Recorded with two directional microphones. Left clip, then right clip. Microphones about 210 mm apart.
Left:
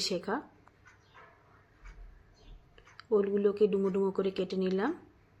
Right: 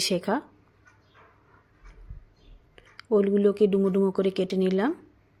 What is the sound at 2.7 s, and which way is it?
Speech, 35° right (ahead or behind).